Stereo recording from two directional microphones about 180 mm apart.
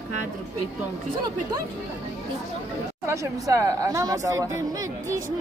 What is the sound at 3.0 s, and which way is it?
Speech, 15° right (ahead or behind).